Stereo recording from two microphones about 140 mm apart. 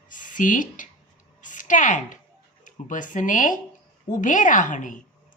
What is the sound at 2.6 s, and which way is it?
A woman's voice, 65° left (ahead or behind).